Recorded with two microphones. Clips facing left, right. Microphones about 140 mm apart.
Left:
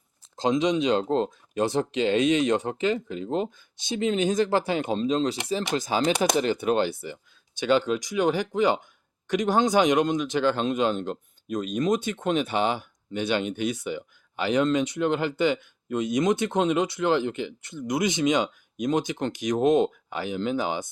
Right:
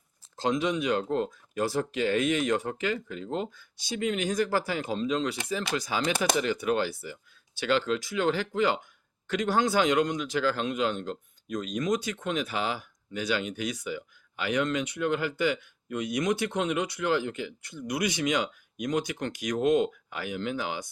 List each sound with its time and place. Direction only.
0.3 s speech: 20° left (ahead or behind)